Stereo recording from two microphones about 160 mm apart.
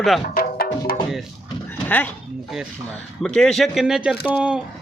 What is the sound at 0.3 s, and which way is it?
Music, 65° left (ahead or behind).